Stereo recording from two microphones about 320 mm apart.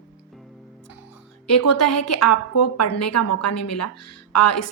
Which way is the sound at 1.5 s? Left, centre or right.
Left.